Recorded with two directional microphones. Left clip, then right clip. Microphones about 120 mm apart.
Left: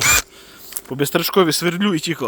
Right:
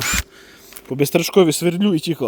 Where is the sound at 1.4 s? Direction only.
60° right (ahead or behind).